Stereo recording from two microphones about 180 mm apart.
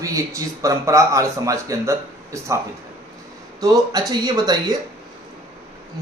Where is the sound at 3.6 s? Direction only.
20° right (ahead or behind).